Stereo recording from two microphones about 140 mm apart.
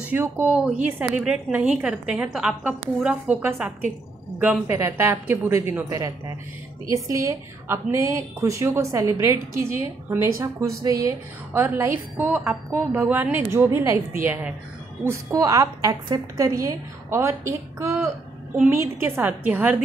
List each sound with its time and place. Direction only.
0.0 s a woman's voice: 15° right (ahead or behind)